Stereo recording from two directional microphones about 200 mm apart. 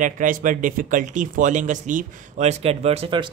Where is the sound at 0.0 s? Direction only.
40° right (ahead or behind).